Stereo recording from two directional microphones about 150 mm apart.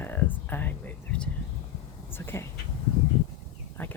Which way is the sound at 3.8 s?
10° left (ahead or behind).